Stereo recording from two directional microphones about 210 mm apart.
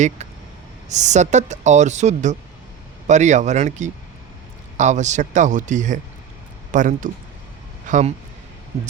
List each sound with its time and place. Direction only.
0.9 s speech: 35° right (ahead or behind)